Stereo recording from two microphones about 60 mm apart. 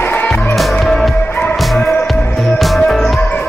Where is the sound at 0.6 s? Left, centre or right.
Centre.